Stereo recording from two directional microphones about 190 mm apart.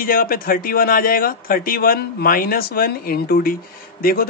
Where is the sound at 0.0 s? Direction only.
50° left (ahead or behind).